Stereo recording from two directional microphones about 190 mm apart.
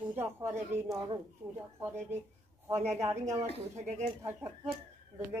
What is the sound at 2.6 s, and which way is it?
Speech, 15° right (ahead or behind).